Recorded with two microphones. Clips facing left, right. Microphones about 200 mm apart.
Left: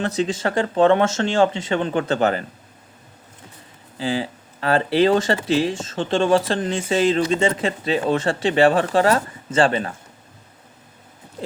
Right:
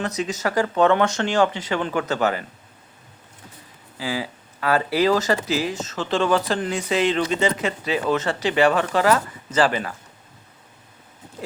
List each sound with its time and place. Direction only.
0.0 s speech: 30° left (ahead or behind)
3.9 s speech: 30° left (ahead or behind)